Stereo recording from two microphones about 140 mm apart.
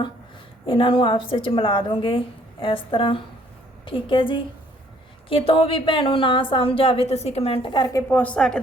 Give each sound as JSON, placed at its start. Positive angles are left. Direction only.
{"t": 0.6, "sound": "a woman's voice", "side_deg": 40}
{"t": 8.1, "sound": "a woman's voice", "side_deg": 10}